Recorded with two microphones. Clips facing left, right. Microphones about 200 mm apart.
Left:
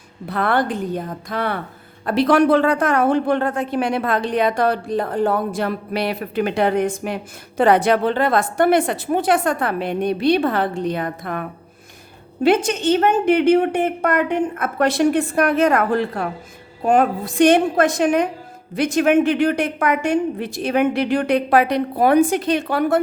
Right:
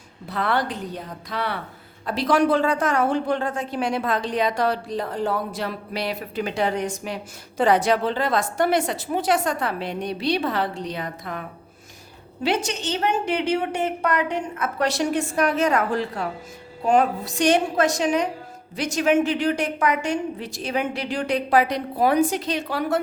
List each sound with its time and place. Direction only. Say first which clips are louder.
0.3 s a woman's voice: left 5 dB; 55° left (ahead or behind)